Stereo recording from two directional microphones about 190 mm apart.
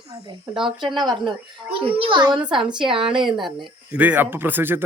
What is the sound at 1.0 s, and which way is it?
Speech, 25° right (ahead or behind).